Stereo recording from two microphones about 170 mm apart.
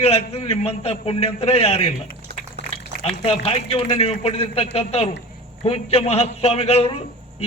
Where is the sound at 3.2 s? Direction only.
35° left (ahead or behind).